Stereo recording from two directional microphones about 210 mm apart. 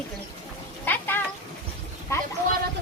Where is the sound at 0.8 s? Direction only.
10° left (ahead or behind).